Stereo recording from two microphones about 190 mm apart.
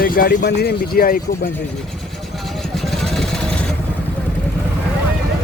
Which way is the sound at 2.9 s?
Centre (ahead or behind).